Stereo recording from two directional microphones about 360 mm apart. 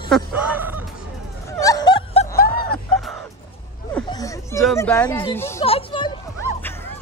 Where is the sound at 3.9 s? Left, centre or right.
Centre.